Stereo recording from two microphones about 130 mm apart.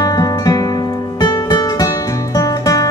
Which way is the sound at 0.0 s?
30° left (ahead or behind).